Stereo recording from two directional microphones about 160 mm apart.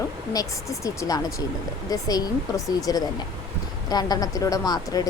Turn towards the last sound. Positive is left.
turn(degrees=25)  # may be behind; listen again after turning